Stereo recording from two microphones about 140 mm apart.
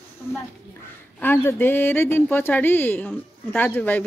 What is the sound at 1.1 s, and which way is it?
Speech, 15° left (ahead or behind).